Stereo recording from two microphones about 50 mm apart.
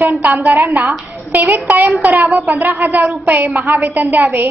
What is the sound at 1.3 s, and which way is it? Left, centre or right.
A woman's voice, right.